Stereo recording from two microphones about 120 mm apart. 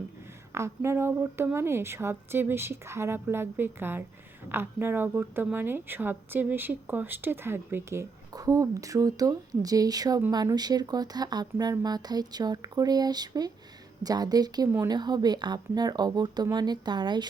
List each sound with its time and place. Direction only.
0.5 s a woman's voice: 25° right (ahead or behind); by 17.2 s 40° right (ahead or behind)